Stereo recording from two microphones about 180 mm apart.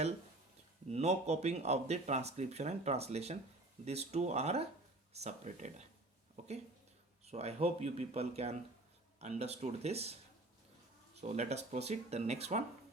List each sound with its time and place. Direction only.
0.9 s speech: 40° right (ahead or behind)
7.3 s speech: 35° right (ahead or behind)